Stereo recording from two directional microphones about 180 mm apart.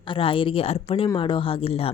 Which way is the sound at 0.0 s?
30° left (ahead or behind).